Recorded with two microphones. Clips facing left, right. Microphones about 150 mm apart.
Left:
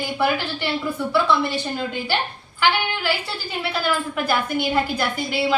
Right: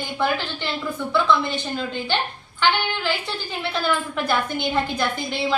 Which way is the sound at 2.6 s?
5° left (ahead or behind).